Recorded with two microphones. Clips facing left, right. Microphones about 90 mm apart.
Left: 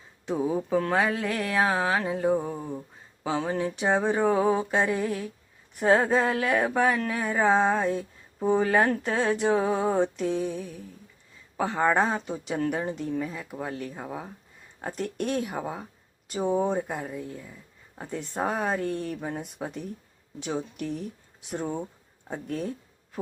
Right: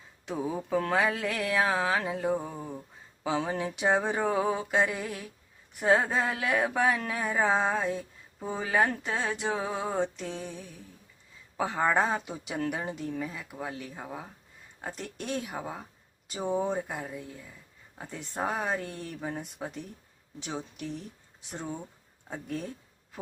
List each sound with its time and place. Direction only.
0.3 s mantra: 15° left (ahead or behind)
1.0 s speech: centre (ahead or behind)
2.2 s mantra: 10° left (ahead or behind)
3.2 s speech: 5° right (ahead or behind)
4.4 s mantra: 20° left (ahead or behind)
5.8 s speech: centre (ahead or behind)
22.3 s speech: centre (ahead or behind)